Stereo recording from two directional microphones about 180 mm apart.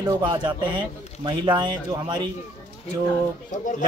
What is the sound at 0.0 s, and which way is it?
Speech, 25° right (ahead or behind).